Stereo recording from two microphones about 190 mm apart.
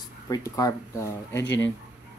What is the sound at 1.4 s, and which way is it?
Speech, 75° left (ahead or behind).